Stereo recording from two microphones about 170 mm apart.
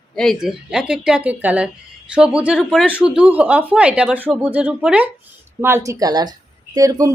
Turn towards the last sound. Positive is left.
turn(degrees=-20)  # may be behind; listen again after turning